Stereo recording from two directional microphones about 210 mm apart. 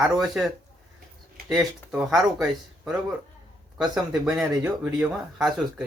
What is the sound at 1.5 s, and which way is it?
Speech, centre (ahead or behind).